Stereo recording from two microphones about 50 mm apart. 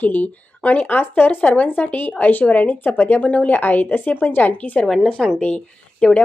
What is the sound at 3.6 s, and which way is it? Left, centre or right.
A woman's voice, left.